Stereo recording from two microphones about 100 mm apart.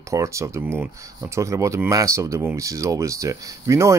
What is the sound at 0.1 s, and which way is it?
Speech, 30° right (ahead or behind).